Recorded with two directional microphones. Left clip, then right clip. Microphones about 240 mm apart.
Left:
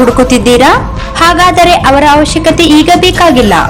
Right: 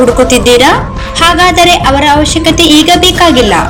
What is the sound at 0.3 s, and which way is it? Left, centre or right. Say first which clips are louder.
A woman's voice: even; left.